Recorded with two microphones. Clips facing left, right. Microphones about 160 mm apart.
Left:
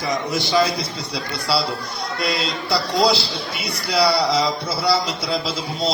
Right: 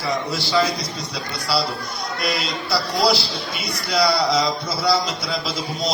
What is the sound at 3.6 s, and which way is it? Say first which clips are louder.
Speech: left 1 dB; 10° left (ahead or behind).